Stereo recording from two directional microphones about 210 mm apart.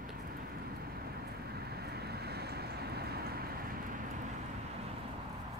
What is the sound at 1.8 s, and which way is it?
Vehicle, 50° right (ahead or behind).